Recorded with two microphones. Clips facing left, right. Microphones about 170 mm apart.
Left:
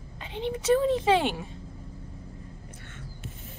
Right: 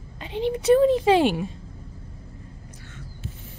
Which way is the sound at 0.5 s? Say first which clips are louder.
Right 6 dB; 20° right (ahead or behind).